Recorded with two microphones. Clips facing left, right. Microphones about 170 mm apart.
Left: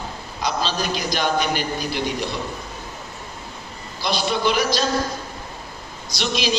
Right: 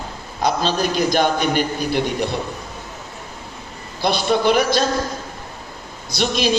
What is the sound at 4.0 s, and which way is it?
Speech, 55° right (ahead or behind).